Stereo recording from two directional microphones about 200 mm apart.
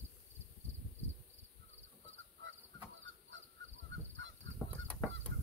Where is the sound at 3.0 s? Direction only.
70° right (ahead or behind).